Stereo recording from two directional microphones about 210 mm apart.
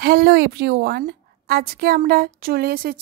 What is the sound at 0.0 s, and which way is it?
A woman's voice, 45° right (ahead or behind).